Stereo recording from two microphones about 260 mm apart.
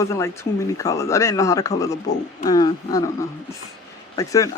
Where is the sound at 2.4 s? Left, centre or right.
Centre.